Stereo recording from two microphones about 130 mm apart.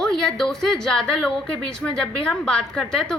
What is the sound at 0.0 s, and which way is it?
A woman's voice, 5° left (ahead or behind).